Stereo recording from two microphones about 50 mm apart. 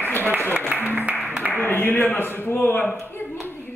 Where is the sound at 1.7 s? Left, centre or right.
Left.